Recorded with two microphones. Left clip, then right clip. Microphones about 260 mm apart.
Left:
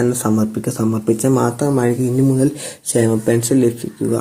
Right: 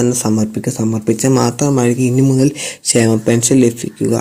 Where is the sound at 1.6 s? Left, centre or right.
Right.